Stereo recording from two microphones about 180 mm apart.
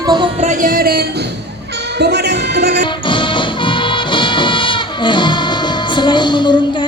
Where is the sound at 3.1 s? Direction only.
25° left (ahead or behind).